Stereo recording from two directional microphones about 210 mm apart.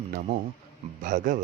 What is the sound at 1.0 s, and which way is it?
Speech, 40° right (ahead or behind).